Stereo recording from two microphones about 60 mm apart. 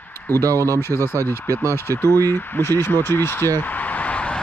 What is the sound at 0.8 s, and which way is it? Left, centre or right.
Speech, left.